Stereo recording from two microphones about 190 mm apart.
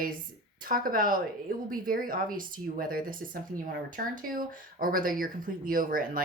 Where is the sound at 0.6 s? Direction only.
50° right (ahead or behind).